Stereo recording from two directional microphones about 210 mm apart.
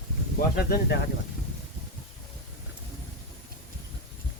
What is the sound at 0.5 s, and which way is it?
Speech, 50° left (ahead or behind).